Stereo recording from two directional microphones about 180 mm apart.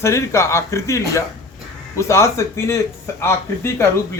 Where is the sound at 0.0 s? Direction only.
15° left (ahead or behind).